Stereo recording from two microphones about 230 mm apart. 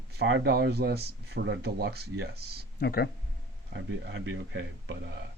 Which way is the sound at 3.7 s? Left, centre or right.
Right.